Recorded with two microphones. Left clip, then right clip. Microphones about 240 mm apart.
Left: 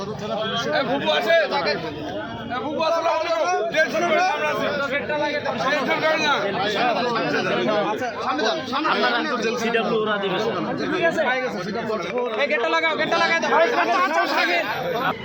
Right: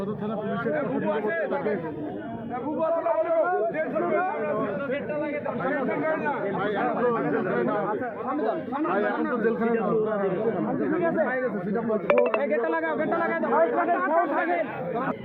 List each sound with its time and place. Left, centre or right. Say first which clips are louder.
0.7 s speech: left 6 dB; left
12.4 s speech: left 5 dB; centre
13.5 s speech: left 1 dB; centre